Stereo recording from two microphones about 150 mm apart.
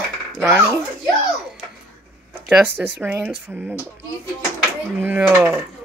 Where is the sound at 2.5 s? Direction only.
15° right (ahead or behind).